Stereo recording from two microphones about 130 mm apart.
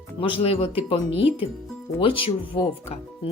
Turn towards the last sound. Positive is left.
turn(degrees=45)  # may be behind; listen again after turning